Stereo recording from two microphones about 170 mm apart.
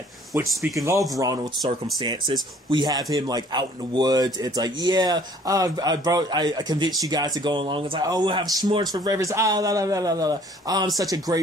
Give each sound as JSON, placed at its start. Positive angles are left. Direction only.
{"t": 1.2, "sound": "a man's voice", "side_deg": -20}